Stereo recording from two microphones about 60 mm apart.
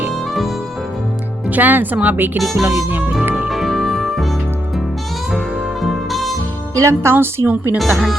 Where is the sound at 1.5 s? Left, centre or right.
Right.